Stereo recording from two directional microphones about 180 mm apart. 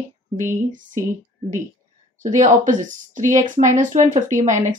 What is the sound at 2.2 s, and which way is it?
Speech, 45° right (ahead or behind).